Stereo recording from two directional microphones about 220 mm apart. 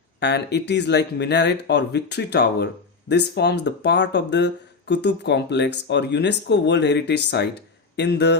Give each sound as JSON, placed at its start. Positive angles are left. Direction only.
{"t": 0.2, "sound": "speech", "side_deg": 50}